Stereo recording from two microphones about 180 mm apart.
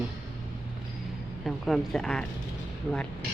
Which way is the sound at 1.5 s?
Centre (ahead or behind).